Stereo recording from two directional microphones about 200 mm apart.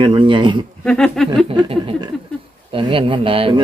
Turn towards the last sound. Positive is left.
turn(degrees=-25)  # may be behind; listen again after turning